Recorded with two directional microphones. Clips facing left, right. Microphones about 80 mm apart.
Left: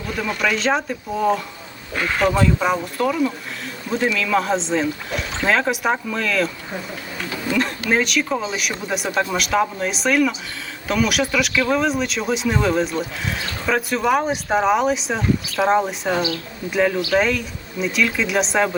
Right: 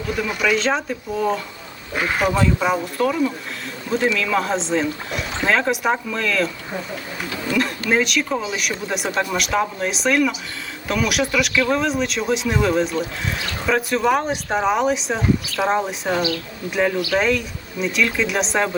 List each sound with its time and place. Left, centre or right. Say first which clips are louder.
0.1 s speech: right 1 dB; centre
2.0 s speech: left 1 dB; centre
2.6 s speech: even; centre
16.1 s speech: right 2 dB; left
16.7 s speech: left 2 dB; centre